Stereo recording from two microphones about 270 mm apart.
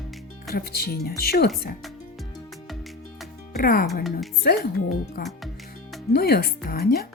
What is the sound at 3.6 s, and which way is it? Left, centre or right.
Speech, left.